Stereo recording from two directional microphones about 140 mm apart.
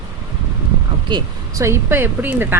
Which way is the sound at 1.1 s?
35° right (ahead or behind).